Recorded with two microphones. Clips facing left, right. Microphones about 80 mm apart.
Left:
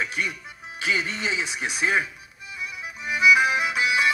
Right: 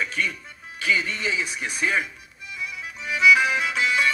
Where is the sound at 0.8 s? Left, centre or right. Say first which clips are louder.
Right 1 dB; left.